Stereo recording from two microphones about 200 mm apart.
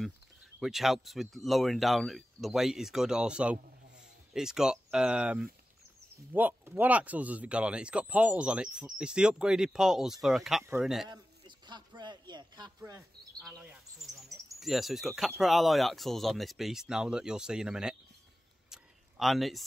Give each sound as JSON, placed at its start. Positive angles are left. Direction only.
{"t": 0.6, "sound": "speech", "side_deg": 0}
{"t": 10.6, "sound": "speech", "side_deg": -10}
{"t": 11.1, "sound": "a sound", "side_deg": -20}
{"t": 13.4, "sound": "bird", "side_deg": 0}
{"t": 14.6, "sound": "speech", "side_deg": 0}
{"t": 18.7, "sound": "a sound", "side_deg": 0}